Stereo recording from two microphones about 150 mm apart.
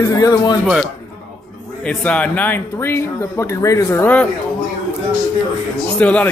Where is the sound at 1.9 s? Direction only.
10° left (ahead or behind).